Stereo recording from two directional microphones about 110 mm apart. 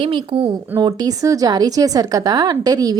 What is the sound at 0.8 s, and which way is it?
A woman's voice, 35° right (ahead or behind).